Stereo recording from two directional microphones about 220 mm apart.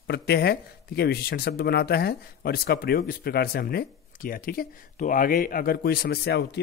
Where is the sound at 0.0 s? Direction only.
50° left (ahead or behind).